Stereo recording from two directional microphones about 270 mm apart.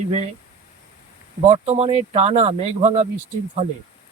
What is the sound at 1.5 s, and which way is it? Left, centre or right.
Speech, right.